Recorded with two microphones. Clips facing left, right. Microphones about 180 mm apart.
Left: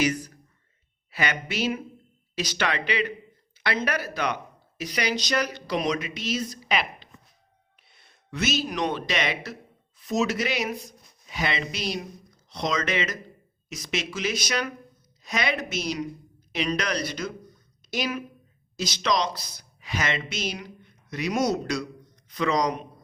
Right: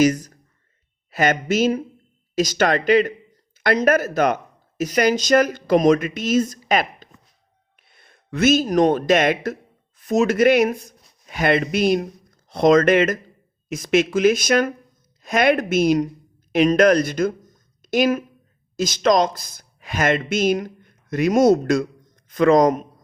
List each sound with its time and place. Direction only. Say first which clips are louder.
0.0 s speech: right 8 dB; 45° right (ahead or behind)
6.7 s a sound: right 7 dB; 45° right (ahead or behind)
7.8 s speech: right 6 dB; 50° right (ahead or behind)